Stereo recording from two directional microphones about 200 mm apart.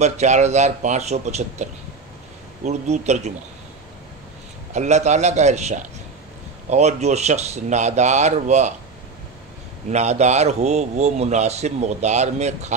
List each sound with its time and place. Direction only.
0.0 s a man's voice: 35° right (ahead or behind)
4.7 s a man's voice: 35° right (ahead or behind)
9.8 s a man's voice: 35° right (ahead or behind)